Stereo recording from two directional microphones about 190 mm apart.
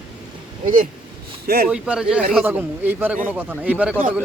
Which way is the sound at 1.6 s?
5° right (ahead or behind).